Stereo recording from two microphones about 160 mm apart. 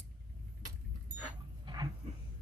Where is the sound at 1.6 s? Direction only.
25° right (ahead or behind).